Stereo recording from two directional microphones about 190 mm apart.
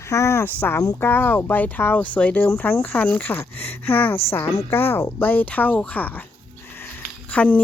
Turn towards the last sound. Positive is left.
turn(degrees=5)  # may be behind; listen again after turning